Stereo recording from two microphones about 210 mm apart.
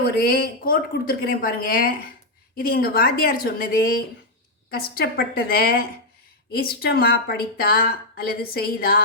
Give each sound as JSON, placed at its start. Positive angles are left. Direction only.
{"t": 0.2, "sound": "a woman's voice", "side_deg": 45}